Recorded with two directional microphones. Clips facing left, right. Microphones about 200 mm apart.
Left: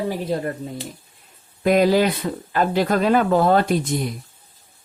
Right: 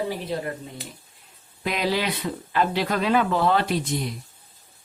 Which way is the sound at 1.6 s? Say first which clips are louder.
Left 9 dB; 45° left (ahead or behind).